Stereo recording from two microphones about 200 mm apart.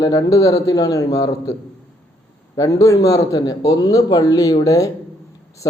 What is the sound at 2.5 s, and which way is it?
Speech, 15° left (ahead or behind).